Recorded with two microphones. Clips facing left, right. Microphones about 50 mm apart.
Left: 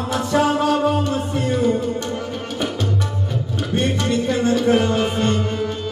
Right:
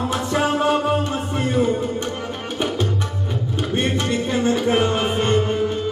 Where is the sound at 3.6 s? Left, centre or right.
Right.